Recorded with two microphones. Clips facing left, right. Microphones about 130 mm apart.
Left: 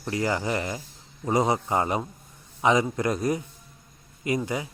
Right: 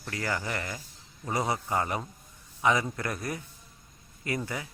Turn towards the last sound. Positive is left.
turn(degrees=20)  # may be behind; listen again after turning